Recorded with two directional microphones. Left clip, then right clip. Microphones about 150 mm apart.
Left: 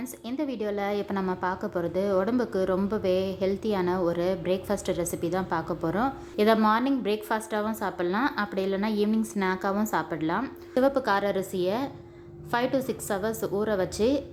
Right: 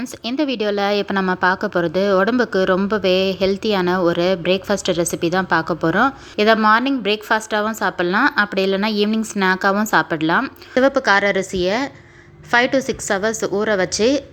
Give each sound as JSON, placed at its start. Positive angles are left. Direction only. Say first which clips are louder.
{"t": 0.0, "sound": "a woman's voice", "louder": "right 10 dB", "side_deg": -25}
{"t": 10.4, "sound": "a woman's voice", "louder": "right 8 dB", "side_deg": -15}